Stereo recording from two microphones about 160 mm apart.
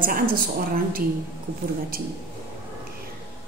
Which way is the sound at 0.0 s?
65° right (ahead or behind).